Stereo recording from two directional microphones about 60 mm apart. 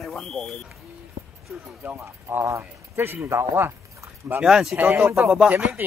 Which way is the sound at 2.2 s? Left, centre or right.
Right.